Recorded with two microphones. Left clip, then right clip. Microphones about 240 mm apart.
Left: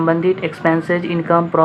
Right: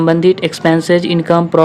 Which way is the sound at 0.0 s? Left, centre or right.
Right.